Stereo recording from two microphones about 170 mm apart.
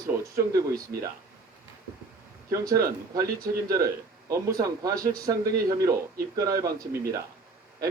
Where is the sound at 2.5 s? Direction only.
20° right (ahead or behind).